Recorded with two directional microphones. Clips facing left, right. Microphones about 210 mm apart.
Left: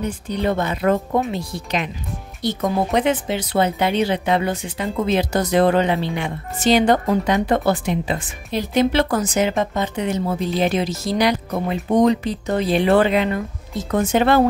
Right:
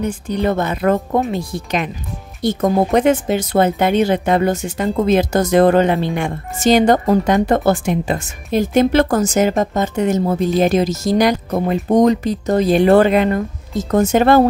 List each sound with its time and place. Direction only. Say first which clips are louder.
0.3 s speech: right 3 dB; 45° right (ahead or behind)